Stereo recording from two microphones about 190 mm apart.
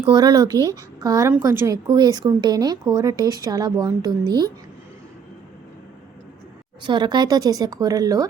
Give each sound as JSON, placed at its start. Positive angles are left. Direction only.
{"t": 0.0, "sound": "a woman's voice", "side_deg": -20}
{"t": 6.8, "sound": "a woman's voice", "side_deg": -25}